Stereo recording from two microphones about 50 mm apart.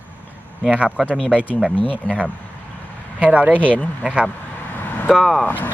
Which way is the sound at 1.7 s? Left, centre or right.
Left.